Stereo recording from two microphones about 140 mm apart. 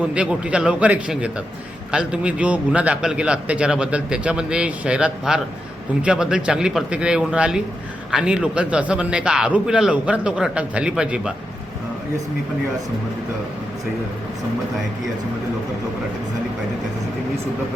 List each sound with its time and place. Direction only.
0.1 s a man's voice: 5° right (ahead or behind)